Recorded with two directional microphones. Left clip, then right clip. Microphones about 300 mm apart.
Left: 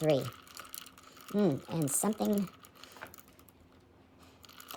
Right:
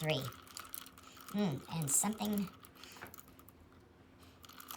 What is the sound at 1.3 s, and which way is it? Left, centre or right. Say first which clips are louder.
Speech: left 8 dB; centre.